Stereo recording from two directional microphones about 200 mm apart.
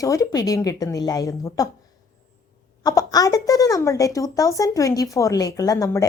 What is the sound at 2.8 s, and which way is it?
A woman's voice, 20° left (ahead or behind).